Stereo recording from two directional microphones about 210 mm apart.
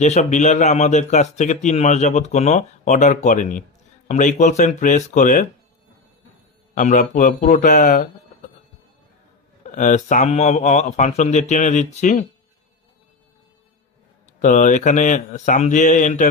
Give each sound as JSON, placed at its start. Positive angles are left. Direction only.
{"t": 0.0, "sound": "a man's voice", "side_deg": 35}
{"t": 6.7, "sound": "a man's voice", "side_deg": 35}
{"t": 9.6, "sound": "a man's voice", "side_deg": 35}
{"t": 14.4, "sound": "a man's voice", "side_deg": 35}